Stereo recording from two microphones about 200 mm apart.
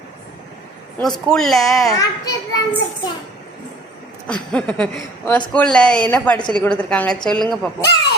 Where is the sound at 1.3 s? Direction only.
Centre (ahead or behind).